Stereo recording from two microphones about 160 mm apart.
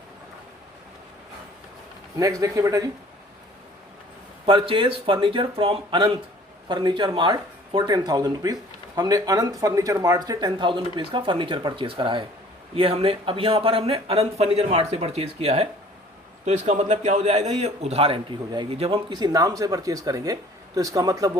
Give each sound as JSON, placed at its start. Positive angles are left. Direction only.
{"t": 2.1, "sound": "a man's voice", "side_deg": -20}
{"t": 4.4, "sound": "a man's voice", "side_deg": -35}